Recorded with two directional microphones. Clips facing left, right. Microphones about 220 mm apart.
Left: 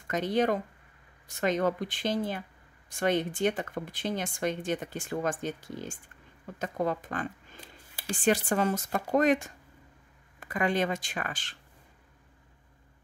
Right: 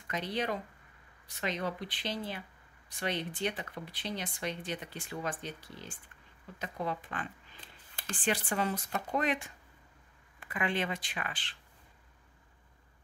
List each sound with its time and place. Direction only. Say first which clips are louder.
0.1 s speech: left 8 dB; 45° left (ahead or behind)
7.6 s a sound: left 6 dB; 10° left (ahead or behind)
8.2 s speech: left 7 dB; 45° left (ahead or behind)